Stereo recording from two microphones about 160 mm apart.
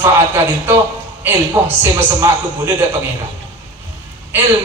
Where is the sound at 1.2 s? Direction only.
15° right (ahead or behind).